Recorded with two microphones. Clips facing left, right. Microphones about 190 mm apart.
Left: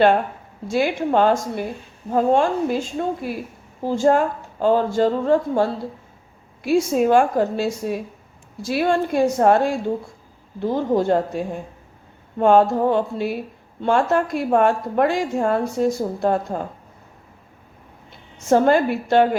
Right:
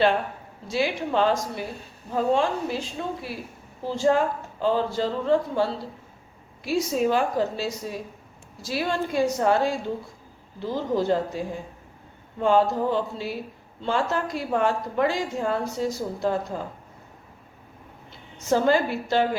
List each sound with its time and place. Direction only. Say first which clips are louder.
0.7 s a woman's voice: left 5 dB; 50° left (ahead or behind)
18.4 s speech: left 5 dB; 55° left (ahead or behind)